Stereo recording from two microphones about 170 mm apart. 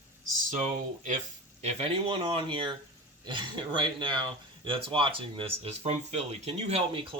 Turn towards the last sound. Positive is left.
turn(degrees=-35)  # may be behind; listen again after turning